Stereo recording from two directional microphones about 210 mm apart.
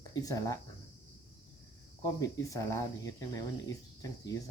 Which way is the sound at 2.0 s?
15° left (ahead or behind).